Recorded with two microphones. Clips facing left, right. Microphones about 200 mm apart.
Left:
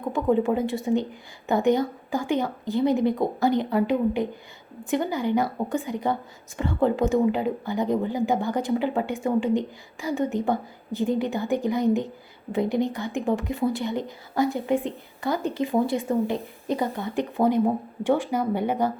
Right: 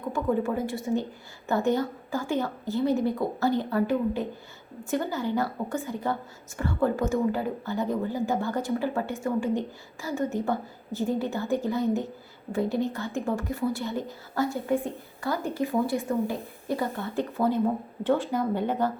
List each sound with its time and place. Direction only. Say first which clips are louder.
0.1 s speech: left 4 dB; 20° left (ahead or behind)